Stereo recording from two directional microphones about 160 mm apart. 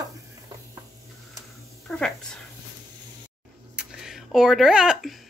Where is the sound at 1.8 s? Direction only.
5° left (ahead or behind).